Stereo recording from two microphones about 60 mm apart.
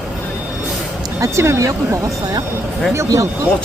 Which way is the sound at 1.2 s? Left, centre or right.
Right.